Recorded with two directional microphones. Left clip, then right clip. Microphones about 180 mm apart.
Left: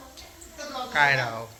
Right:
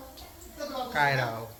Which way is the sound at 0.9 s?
5° right (ahead or behind).